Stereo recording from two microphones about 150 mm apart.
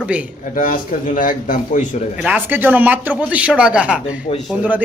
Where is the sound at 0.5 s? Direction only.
65° left (ahead or behind).